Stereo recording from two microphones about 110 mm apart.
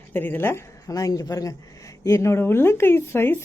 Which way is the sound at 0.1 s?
20° left (ahead or behind).